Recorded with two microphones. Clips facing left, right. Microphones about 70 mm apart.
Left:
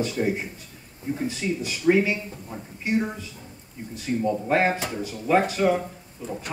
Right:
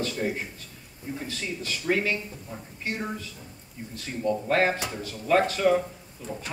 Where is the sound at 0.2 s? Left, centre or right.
Centre.